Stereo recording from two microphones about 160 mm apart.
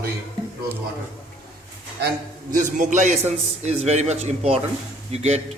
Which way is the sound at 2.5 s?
55° right (ahead or behind).